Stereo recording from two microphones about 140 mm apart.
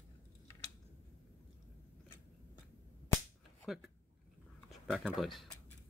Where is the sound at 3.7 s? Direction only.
Centre (ahead or behind).